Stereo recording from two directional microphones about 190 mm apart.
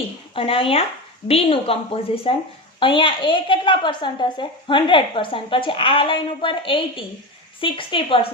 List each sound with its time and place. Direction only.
0.3 s a woman's voice: 30° left (ahead or behind)